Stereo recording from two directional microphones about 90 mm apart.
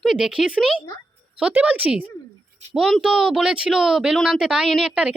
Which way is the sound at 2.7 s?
Centre (ahead or behind).